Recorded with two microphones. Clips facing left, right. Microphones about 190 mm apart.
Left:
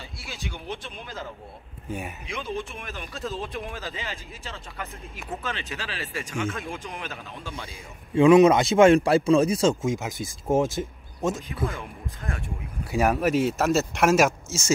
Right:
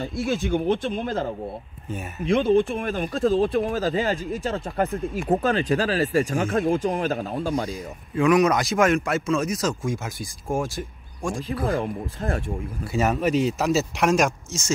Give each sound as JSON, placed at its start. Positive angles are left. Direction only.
{"t": 0.0, "sound": "speech", "side_deg": -50}
{"t": 3.3, "sound": "speech", "side_deg": -35}
{"t": 8.1, "sound": "speech", "side_deg": 25}
{"t": 11.6, "sound": "speech", "side_deg": -35}
{"t": 12.9, "sound": "speech", "side_deg": 10}